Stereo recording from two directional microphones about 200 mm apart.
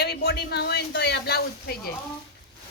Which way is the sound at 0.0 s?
55° left (ahead or behind).